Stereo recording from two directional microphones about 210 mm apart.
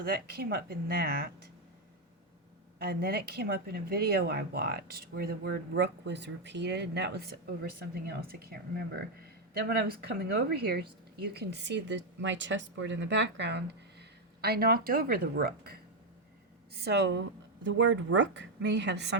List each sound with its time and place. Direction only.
0.0 s speech: 50° right (ahead or behind)
2.7 s speech: 45° right (ahead or behind)
9.6 s a woman's voice: 45° right (ahead or behind)